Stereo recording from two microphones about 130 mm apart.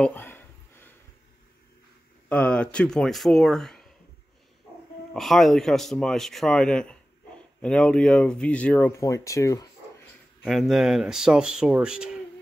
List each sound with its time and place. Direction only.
0.0 s a sound: 15° left (ahead or behind)
2.2 s speech: 10° left (ahead or behind)
5.1 s speech: centre (ahead or behind)
9.0 s speech: 25° left (ahead or behind)
10.4 s speech: centre (ahead or behind)